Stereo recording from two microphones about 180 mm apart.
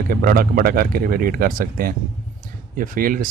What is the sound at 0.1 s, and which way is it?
Speech, 55° right (ahead or behind).